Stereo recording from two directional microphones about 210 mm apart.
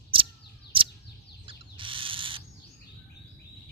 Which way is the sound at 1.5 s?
25° right (ahead or behind).